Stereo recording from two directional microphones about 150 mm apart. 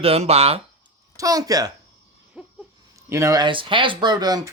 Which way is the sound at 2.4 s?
5° right (ahead or behind).